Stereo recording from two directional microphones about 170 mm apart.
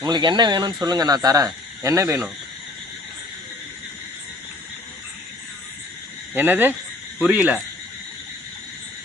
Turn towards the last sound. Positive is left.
turn(degrees=-10)  # may be behind; listen again after turning